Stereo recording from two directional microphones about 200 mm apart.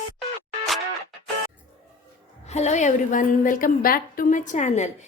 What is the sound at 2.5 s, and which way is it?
A woman's voice, 35° left (ahead or behind).